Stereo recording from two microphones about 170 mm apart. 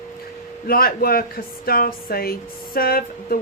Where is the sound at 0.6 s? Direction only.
60° left (ahead or behind).